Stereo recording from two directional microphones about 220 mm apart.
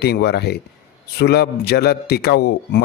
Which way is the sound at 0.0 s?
45° left (ahead or behind).